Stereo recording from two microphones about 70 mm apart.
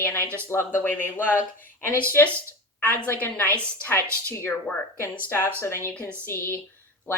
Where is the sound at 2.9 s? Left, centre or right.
Left.